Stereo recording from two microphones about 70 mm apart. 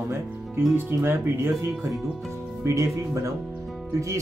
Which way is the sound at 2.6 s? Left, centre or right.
Right.